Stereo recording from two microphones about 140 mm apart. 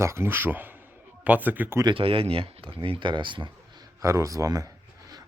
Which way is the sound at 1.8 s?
35° right (ahead or behind).